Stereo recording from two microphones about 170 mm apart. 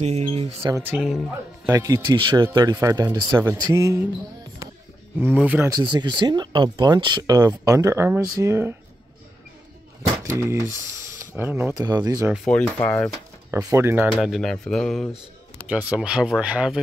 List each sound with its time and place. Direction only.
0.0 s a sound: 40° right (ahead or behind)
0.6 s speech: 15° right (ahead or behind)
5.2 s speech: 10° right (ahead or behind)
5.7 s speech: 25° right (ahead or behind)
10.2 s speech: 15° right (ahead or behind)
11.7 s speech: 20° right (ahead or behind)
12.4 s speech: 10° left (ahead or behind)
13.5 s speech: 20° right (ahead or behind)
14.2 s speech: centre (ahead or behind)
15.7 s speech: 10° right (ahead or behind)